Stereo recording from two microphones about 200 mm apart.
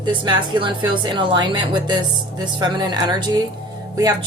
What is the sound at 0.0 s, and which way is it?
A woman's voice, 25° right (ahead or behind).